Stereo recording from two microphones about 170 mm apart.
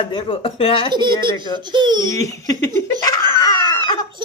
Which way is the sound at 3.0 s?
20° left (ahead or behind).